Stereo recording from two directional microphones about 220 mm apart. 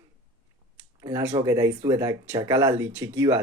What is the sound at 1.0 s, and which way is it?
Speech, 15° right (ahead or behind).